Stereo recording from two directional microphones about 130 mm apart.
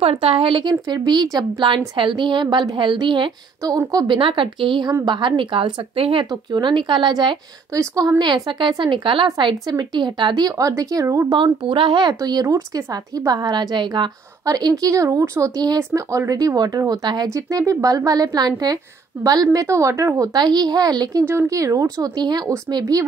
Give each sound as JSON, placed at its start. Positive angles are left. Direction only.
{"t": 0.0, "sound": "speech", "side_deg": -50}
{"t": 4.2, "sound": "speech", "side_deg": -40}
{"t": 7.8, "sound": "speech", "side_deg": -25}
{"t": 11.3, "sound": "speech", "side_deg": -40}
{"t": 20.3, "sound": "speech", "side_deg": -30}